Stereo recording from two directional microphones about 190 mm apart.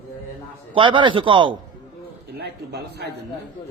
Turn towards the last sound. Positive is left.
turn(degrees=-60)  # may be behind; listen again after turning